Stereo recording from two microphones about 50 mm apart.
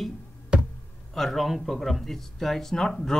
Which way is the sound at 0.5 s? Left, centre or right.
Right.